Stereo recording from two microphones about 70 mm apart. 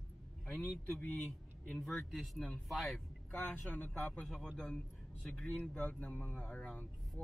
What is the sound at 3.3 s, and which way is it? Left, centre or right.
Speech, centre.